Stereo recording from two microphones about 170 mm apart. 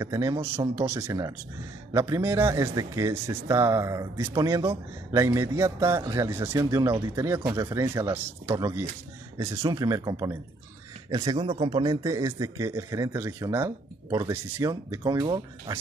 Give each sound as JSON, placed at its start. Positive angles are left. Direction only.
{"t": 0.0, "sound": "a man's voice", "side_deg": -20}